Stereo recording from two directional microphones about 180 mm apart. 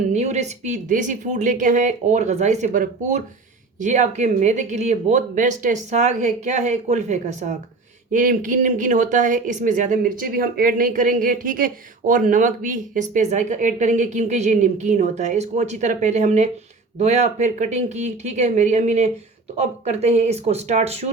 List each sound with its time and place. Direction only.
0.1 s speech: 40° right (ahead or behind)